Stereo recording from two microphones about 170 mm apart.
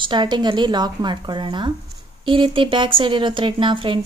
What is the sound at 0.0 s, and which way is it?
Speech, 25° right (ahead or behind).